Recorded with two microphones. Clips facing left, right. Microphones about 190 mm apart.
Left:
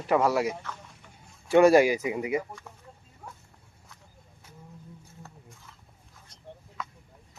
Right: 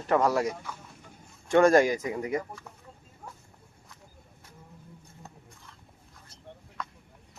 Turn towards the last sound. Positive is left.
turn(degrees=5)  # may be behind; listen again after turning